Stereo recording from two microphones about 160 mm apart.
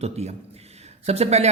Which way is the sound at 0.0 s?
40° right (ahead or behind).